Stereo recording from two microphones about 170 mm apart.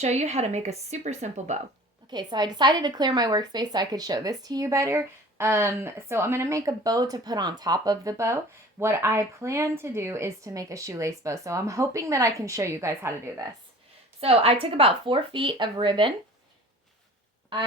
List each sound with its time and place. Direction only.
0.0 s speech: 40° right (ahead or behind)
2.0 s a woman's voice: 25° right (ahead or behind)
14.2 s speech: 35° right (ahead or behind)